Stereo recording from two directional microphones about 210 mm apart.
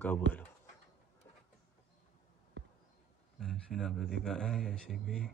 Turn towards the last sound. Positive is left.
turn(degrees=0)  # may be behind; listen again after turning